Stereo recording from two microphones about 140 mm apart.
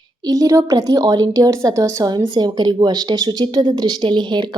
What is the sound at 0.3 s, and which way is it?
A woman's voice, 25° right (ahead or behind).